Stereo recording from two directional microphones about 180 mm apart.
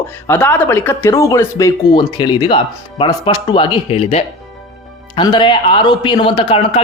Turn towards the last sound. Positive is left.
turn(degrees=30)  # may be behind; listen again after turning